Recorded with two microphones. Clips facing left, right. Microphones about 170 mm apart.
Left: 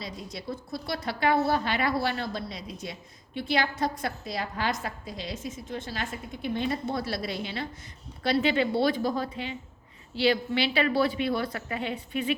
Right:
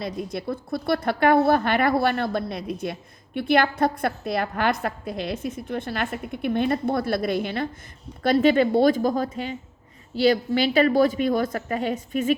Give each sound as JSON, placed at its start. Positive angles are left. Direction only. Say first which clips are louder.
{"t": 0.0, "sound": "a woman's voice", "louder": "right 8 dB", "side_deg": -55}